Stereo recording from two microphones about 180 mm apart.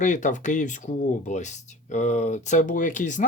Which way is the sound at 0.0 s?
45° left (ahead or behind).